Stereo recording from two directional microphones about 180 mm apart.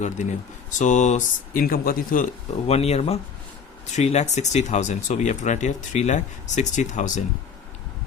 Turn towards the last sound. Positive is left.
turn(degrees=45)  # may be behind; listen again after turning